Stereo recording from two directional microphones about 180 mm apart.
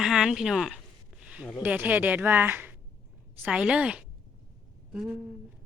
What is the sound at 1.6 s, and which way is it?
A woman's voice, 10° right (ahead or behind).